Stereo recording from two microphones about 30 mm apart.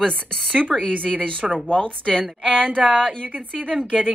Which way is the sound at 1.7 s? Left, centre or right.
Left.